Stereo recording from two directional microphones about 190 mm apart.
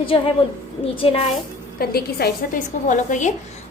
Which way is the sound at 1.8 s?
55° left (ahead or behind).